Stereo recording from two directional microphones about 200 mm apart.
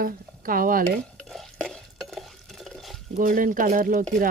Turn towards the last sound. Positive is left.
turn(degrees=-45)  # may be behind; listen again after turning